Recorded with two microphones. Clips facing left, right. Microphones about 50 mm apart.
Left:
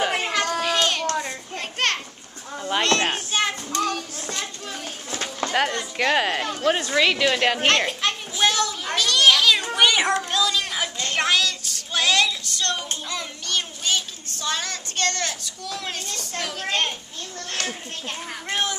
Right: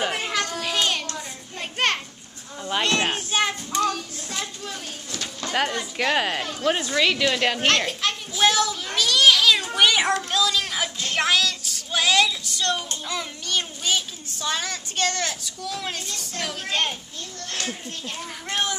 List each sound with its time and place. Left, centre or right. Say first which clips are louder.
0.7 s child singing: right 2 dB; centre
1.0 s child singing: left 9 dB; left
1.6 s children playing: right 1 dB; centre
2.8 s a sound: left 1 dB; centre
3.3 s child singing: even; centre
3.8 s a sound: right 1 dB; centre
5.1 s a sound: left 5 dB; left
5.5 s a child's voice: even; centre
8.9 s children playing: even; centre
9.8 s child singing: even; centre
13.1 s a child's voice: right 1 dB; centre
17.6 s speech: left 1 dB; left
18.5 s speech: even; centre